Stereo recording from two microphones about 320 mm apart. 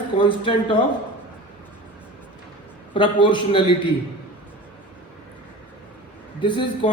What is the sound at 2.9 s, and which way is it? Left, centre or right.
Speech, centre.